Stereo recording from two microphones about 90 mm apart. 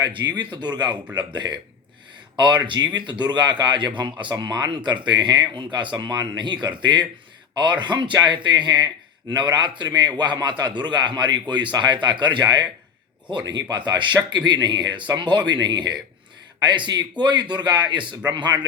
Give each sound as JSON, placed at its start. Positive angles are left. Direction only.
{"t": 0.0, "sound": "a man's voice", "side_deg": -55}